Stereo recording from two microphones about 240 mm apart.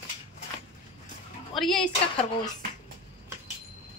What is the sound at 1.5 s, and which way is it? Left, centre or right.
Speech, centre.